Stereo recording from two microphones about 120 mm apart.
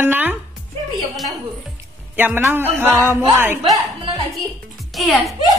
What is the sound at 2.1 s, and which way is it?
Music, 15° right (ahead or behind).